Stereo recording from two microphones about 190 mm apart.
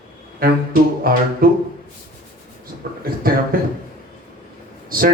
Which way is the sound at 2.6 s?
50° right (ahead or behind).